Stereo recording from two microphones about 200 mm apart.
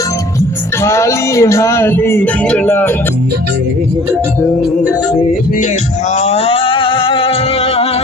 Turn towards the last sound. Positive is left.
turn(degrees=25)  # may be behind; listen again after turning